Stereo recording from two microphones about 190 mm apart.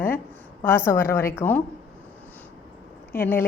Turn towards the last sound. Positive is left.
turn(degrees=10)  # may be behind; listen again after turning